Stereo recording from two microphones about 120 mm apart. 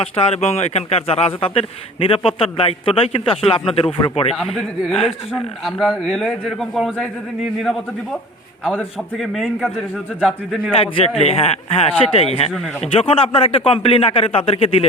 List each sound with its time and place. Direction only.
0.0 s a man's voice: 65° left (ahead or behind)
4.5 s speech: centre (ahead or behind)
9.1 s a man's voice: centre (ahead or behind)
10.8 s a man's voice: 50° left (ahead or behind)